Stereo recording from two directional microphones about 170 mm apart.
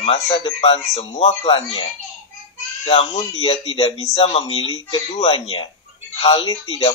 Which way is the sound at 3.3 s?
40° left (ahead or behind).